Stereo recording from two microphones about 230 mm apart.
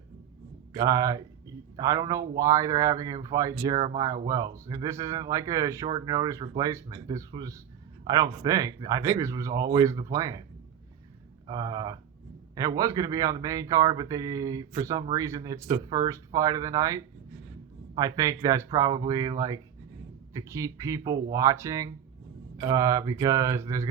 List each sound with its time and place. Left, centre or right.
0.7 s speech: centre
11.4 s speech: centre